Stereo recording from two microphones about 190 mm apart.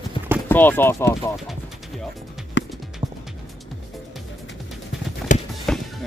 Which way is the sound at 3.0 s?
20° right (ahead or behind).